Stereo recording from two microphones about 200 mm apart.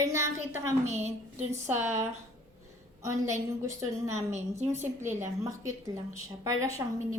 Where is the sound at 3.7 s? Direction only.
15° right (ahead or behind).